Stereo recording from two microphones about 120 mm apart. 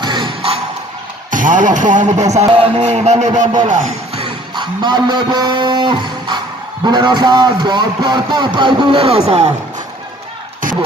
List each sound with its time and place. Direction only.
0.0 s music: 40° right (ahead or behind)
1.3 s speech: 90° right; by 2.5 s 70° right (ahead or behind)
2.5 s speech: 50° right (ahead or behind); by 3.4 s 75° right (ahead or behind)
3.6 s speech: 90° right
4.6 s speech: 40° right (ahead or behind); by 9.5 s 60° right (ahead or behind)